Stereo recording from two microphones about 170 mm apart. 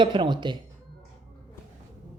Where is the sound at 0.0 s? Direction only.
25° right (ahead or behind).